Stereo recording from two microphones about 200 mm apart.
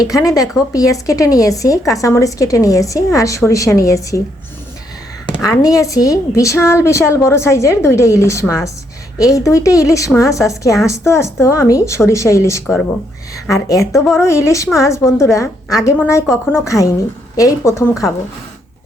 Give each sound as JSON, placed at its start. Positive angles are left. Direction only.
{"t": 0.0, "sound": "a woman's voice", "side_deg": 15}
{"t": 5.4, "sound": "a woman's voice", "side_deg": 15}